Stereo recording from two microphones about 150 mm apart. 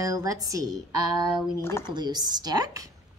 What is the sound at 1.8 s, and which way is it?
A woman's voice, 30° right (ahead or behind).